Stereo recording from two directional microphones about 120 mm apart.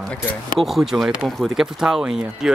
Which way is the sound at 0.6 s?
Centre (ahead or behind).